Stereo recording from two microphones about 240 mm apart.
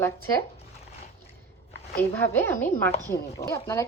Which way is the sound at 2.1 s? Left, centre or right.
Centre.